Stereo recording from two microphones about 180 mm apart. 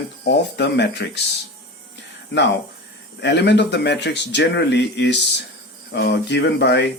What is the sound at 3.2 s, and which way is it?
Speech, 70° left (ahead or behind).